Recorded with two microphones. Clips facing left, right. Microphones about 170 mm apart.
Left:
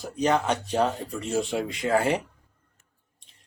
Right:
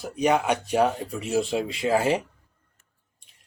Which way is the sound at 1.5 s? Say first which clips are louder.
Right 1 dB; 20° right (ahead or behind).